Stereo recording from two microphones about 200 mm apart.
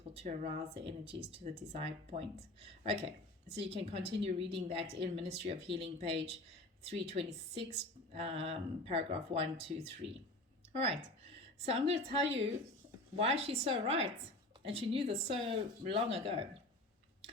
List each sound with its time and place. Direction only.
0.1 s a woman's voice: 30° right (ahead or behind)
3.6 s a woman's voice: 30° right (ahead or behind)